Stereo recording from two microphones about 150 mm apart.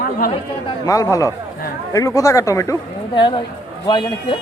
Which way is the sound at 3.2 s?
30° left (ahead or behind).